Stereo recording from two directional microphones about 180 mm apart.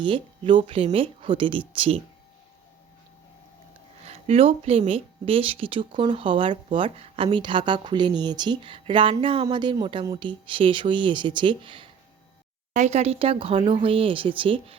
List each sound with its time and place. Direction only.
0.0 s speech: 25° right (ahead or behind)
4.0 s speech: 35° right (ahead or behind)
12.7 s speech: 40° right (ahead or behind)